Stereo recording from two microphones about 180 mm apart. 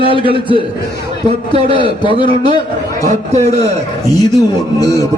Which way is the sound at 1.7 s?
25° left (ahead or behind).